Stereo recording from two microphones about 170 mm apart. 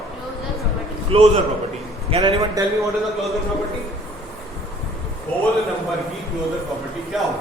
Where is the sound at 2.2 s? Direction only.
20° right (ahead or behind).